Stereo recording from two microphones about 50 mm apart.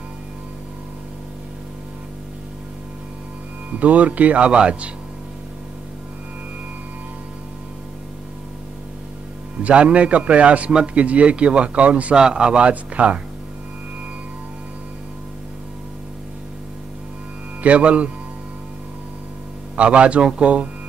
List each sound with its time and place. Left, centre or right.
3.7 s speech: right
9.6 s speech: right
17.6 s speech: right
19.7 s speech: right